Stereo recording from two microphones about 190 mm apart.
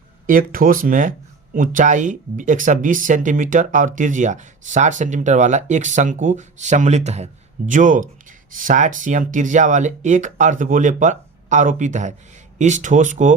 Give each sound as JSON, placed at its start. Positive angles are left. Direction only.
{"t": 0.3, "sound": "speech", "side_deg": -45}